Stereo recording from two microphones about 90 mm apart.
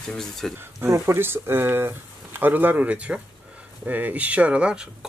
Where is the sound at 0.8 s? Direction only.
30° right (ahead or behind); by 5.1 s 10° right (ahead or behind).